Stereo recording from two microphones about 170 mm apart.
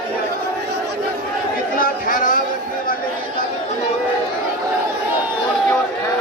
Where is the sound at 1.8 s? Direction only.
50° left (ahead or behind).